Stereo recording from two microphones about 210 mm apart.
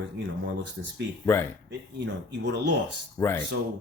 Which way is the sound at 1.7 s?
55° right (ahead or behind).